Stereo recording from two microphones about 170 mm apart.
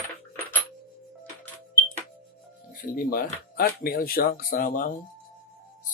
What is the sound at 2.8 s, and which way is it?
Speech, 60° left (ahead or behind).